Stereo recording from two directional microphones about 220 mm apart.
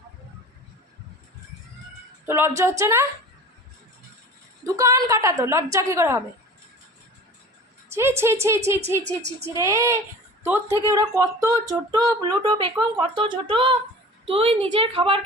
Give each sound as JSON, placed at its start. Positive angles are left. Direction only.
{"t": 2.2, "sound": "speech", "side_deg": -10}
{"t": 4.6, "sound": "speech", "side_deg": -15}
{"t": 7.9, "sound": "a woman's voice", "side_deg": -10}